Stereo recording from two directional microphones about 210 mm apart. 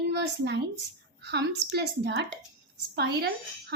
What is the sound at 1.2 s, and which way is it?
A woman's voice, 50° right (ahead or behind).